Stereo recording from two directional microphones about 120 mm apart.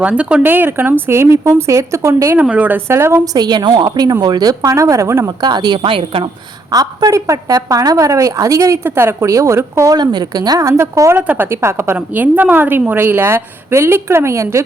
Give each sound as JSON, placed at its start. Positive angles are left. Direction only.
{"t": 0.0, "sound": "a woman's voice", "side_deg": -10}
{"t": 2.4, "sound": "speech", "side_deg": -10}
{"t": 3.3, "sound": "a woman's voice", "side_deg": -35}
{"t": 5.4, "sound": "a woman's voice", "side_deg": -35}
{"t": 6.7, "sound": "a woman's voice", "side_deg": -35}